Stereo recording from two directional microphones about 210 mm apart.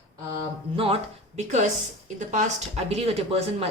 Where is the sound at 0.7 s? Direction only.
25° right (ahead or behind).